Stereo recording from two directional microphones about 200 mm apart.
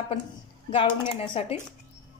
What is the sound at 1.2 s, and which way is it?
Speech, 25° left (ahead or behind).